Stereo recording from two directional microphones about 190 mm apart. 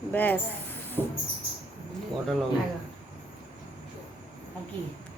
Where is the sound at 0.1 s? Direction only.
10° left (ahead or behind).